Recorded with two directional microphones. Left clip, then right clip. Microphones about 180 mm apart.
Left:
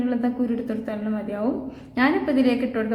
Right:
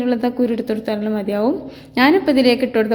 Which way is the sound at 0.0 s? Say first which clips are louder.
Right 7 dB; 40° right (ahead or behind).